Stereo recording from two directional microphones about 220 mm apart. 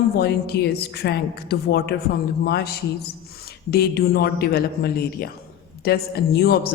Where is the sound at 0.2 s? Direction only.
45° left (ahead or behind).